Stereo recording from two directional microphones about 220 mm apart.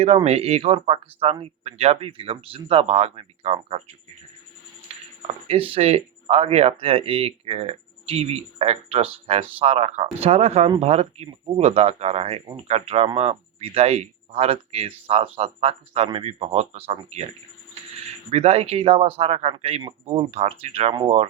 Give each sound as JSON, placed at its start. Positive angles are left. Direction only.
{"t": 0.0, "sound": "speech", "side_deg": -30}
{"t": 4.9, "sound": "a sound", "side_deg": -25}
{"t": 5.5, "sound": "speech", "side_deg": -25}
{"t": 18.3, "sound": "speech", "side_deg": -25}